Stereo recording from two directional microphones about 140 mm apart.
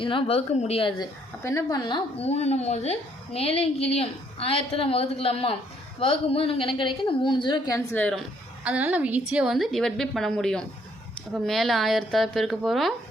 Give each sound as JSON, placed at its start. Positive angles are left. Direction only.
{"t": 0.0, "sound": "a woman's voice", "side_deg": 35}
{"t": 1.4, "sound": "a woman's voice", "side_deg": 20}
{"t": 2.1, "sound": "a woman's voice", "side_deg": 50}
{"t": 7.9, "sound": "a woman's voice", "side_deg": 10}
{"t": 8.6, "sound": "a woman's voice", "side_deg": -10}